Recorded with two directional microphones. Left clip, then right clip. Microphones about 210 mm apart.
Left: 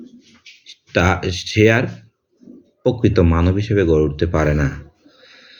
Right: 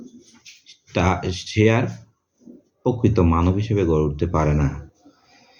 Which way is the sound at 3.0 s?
20° left (ahead or behind).